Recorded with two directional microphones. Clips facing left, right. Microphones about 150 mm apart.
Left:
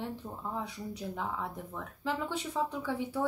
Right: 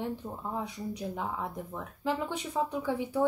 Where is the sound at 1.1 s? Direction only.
15° right (ahead or behind).